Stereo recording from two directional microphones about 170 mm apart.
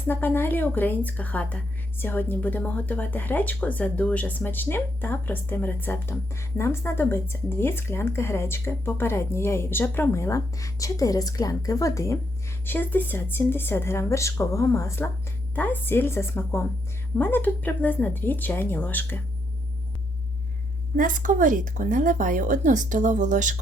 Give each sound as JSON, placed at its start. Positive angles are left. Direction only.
{"t": 0.1, "sound": "a woman's voice", "side_deg": 15}
{"t": 20.9, "sound": "speech", "side_deg": -50}